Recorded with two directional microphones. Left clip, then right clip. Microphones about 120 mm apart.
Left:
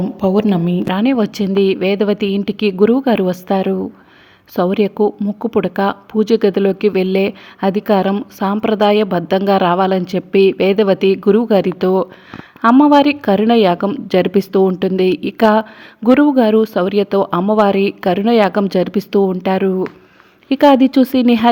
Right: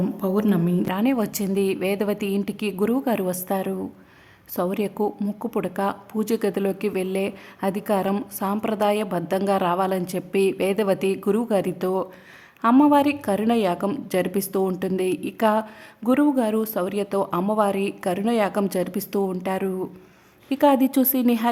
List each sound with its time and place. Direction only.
0.2 s a woman's voice: 30° left (ahead or behind)